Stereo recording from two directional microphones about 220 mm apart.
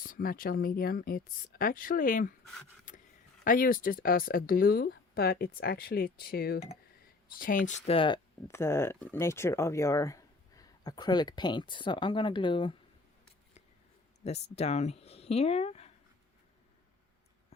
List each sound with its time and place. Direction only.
0.0 s speech: 40° left (ahead or behind)
2.9 s a sound: 35° left (ahead or behind)
3.4 s speech: 40° left (ahead or behind); by 12.7 s 20° left (ahead or behind)
14.3 s speech: 30° left (ahead or behind)